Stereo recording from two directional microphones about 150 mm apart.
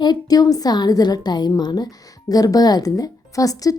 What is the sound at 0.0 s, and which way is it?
A woman's voice, 25° left (ahead or behind).